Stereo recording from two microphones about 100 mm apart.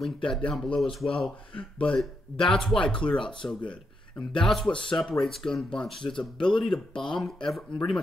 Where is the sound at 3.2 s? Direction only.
55° left (ahead or behind).